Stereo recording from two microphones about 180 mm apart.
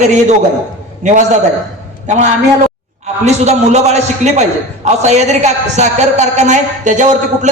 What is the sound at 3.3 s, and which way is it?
A man's voice, 40° right (ahead or behind).